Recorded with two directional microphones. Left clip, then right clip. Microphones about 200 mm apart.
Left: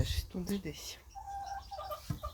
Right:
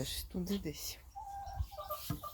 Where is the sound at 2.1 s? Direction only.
40° right (ahead or behind).